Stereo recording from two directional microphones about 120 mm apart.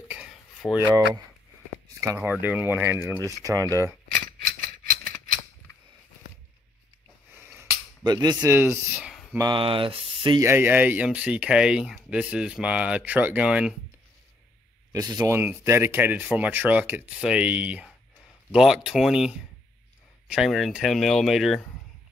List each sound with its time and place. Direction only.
0.7 s speech: 30° right (ahead or behind)
2.2 s speech: 15° right (ahead or behind)
7.3 s a sound: 15° right (ahead or behind)
8.0 s speech: 35° right (ahead or behind)
8.4 s speech: 20° right (ahead or behind)
9.0 s a sound: 5° right (ahead or behind)
9.6 s speech: 50° right (ahead or behind)
10.4 s speech: 20° right (ahead or behind)
14.9 s speech: 30° right (ahead or behind)
15.3 s speech: 20° right (ahead or behind); by 21.6 s centre (ahead or behind)